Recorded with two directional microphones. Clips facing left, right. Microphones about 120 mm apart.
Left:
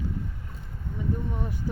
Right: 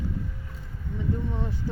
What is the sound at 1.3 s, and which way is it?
Speech, 15° left (ahead or behind).